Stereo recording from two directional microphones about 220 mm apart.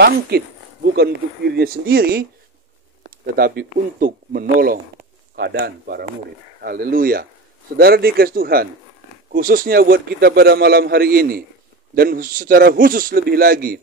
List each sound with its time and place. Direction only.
0.3 s a man's voice: 45° right (ahead or behind)
3.3 s a man's voice: 40° right (ahead or behind)